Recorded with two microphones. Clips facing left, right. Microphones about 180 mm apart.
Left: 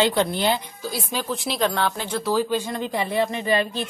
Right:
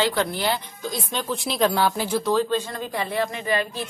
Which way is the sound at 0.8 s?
5° left (ahead or behind).